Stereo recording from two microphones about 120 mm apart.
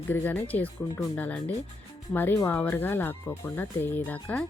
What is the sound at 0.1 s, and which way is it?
Speech, 15° left (ahead or behind).